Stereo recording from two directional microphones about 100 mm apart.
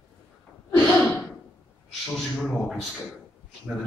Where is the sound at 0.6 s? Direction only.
25° left (ahead or behind).